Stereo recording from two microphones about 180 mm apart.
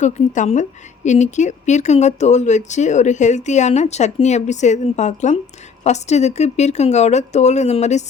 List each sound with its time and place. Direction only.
0.0 s a woman's voice: 40° left (ahead or behind)